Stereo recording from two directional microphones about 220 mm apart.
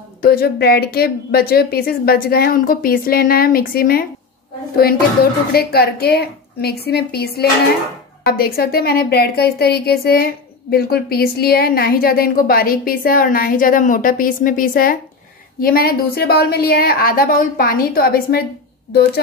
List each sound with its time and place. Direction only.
0.2 s a woman's voice: 40° left (ahead or behind)
5.5 s a woman's voice: 45° left (ahead or behind)